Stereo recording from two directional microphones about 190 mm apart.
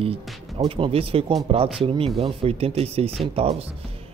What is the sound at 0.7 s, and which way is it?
Speech, 30° right (ahead or behind).